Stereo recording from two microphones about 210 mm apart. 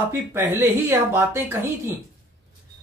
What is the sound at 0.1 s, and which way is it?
A man's voice, 10° right (ahead or behind).